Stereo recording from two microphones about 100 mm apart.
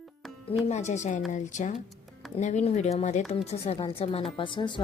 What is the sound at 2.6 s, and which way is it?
Speech, 90° left.